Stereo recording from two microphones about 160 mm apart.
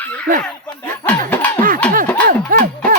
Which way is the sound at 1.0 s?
10° left (ahead or behind).